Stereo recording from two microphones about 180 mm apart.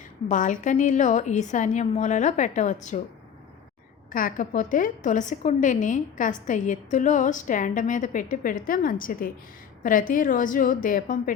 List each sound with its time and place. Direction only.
0.3 s a woman's voice: 45° left (ahead or behind)
4.1 s a woman's voice: 50° left (ahead or behind)